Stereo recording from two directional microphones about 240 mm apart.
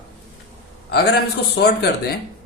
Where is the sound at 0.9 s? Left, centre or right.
Left.